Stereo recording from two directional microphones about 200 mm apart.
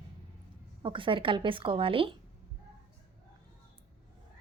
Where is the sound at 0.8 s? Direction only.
25° right (ahead or behind).